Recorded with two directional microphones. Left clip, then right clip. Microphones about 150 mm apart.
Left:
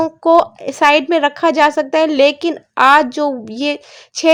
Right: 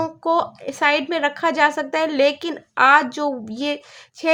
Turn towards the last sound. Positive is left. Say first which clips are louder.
# left 8 dB
turn(degrees=40)  # may be behind; listen again after turning